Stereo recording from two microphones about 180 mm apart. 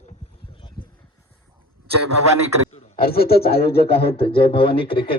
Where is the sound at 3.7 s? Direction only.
30° left (ahead or behind).